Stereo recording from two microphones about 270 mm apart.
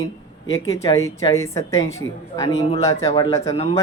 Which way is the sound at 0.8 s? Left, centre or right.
Centre.